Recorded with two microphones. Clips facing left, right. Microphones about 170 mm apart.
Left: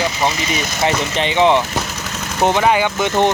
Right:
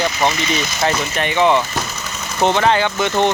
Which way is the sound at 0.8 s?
20° left (ahead or behind).